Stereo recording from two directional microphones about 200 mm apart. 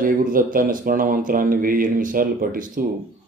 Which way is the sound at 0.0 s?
45° right (ahead or behind).